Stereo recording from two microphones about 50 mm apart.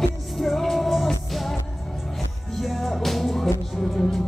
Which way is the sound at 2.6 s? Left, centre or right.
Centre.